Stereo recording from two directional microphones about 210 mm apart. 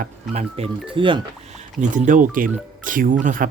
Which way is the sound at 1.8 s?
35° right (ahead or behind).